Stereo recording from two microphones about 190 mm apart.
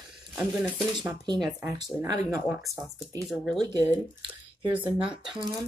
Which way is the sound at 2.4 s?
5° right (ahead or behind).